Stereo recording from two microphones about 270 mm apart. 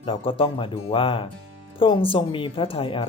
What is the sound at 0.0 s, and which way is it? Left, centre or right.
Speech, centre.